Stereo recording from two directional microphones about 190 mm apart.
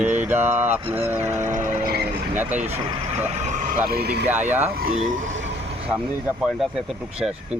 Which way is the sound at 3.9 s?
55° right (ahead or behind).